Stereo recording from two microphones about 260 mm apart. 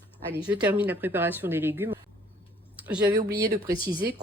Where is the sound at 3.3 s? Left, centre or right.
Centre.